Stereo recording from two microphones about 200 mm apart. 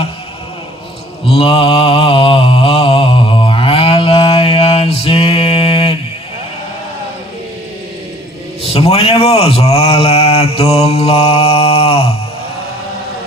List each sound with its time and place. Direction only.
1.3 s mantra: 30° left (ahead or behind)
8.6 s speech: 30° left (ahead or behind)